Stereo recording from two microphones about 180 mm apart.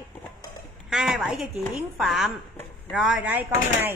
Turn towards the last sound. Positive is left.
turn(degrees=-10)  # may be behind; listen again after turning